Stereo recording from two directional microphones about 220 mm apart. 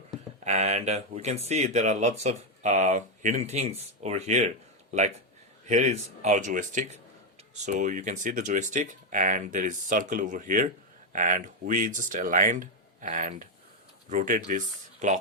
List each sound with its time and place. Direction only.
0.4 s speech: 30° right (ahead or behind)